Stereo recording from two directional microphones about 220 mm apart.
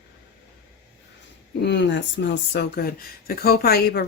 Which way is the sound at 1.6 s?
50° left (ahead or behind).